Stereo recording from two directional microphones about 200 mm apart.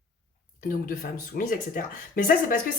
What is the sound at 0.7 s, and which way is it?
A woman's voice, 45° left (ahead or behind).